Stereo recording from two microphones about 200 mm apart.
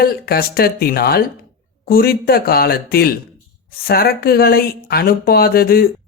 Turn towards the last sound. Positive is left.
turn(degrees=50)  # may be behind; listen again after turning